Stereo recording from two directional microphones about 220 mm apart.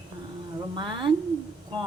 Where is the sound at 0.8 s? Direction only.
20° right (ahead or behind).